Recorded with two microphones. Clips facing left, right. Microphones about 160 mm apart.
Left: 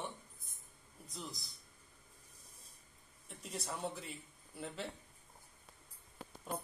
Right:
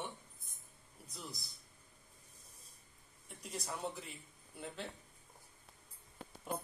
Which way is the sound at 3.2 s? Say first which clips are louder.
Even; centre (ahead or behind).